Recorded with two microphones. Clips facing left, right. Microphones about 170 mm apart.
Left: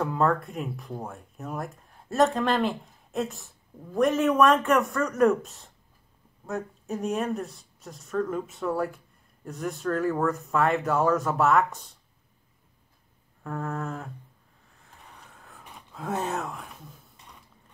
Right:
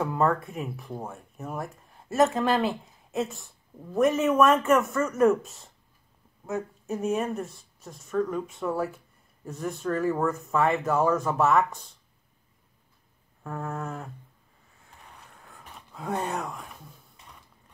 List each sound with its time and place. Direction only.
0.0 s speech: centre (ahead or behind)
13.4 s speech: centre (ahead or behind)
14.8 s a sound: centre (ahead or behind)